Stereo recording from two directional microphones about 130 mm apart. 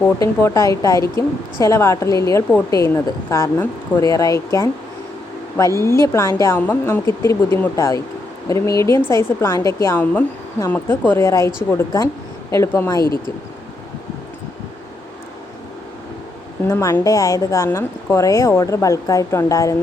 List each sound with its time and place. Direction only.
0.2 s a woman's voice: 25° left (ahead or behind)
16.6 s a woman's voice: 20° left (ahead or behind)